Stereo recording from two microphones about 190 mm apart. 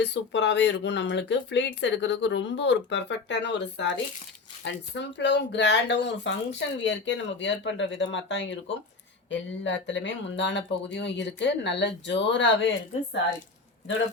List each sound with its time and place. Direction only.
0.0 s speech: 65° left (ahead or behind)